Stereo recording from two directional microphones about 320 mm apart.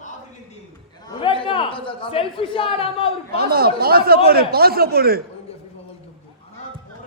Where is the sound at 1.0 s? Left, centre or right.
Centre.